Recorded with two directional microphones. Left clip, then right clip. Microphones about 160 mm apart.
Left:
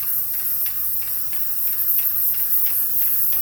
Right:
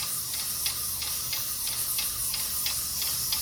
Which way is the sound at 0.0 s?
25° right (ahead or behind).